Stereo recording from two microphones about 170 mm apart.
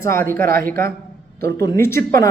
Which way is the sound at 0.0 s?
15° left (ahead or behind).